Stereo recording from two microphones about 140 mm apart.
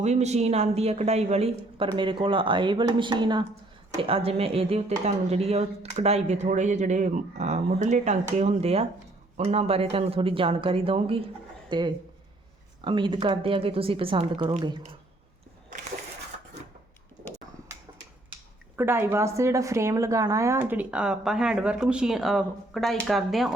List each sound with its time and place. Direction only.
0.0 s speech: 55° right (ahead or behind)
2.0 s speech: 35° right (ahead or behind)
3.9 s speech: 45° right (ahead or behind)
18.8 s a woman's voice: 15° right (ahead or behind); by 23.5 s centre (ahead or behind)